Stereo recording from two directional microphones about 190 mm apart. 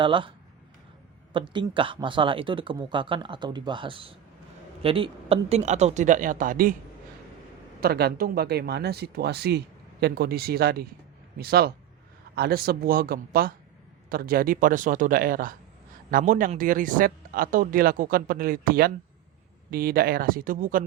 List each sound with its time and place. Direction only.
0.0 s speech: 25° right (ahead or behind); by 6.7 s 45° right (ahead or behind)
7.8 s a man's voice: 55° right (ahead or behind)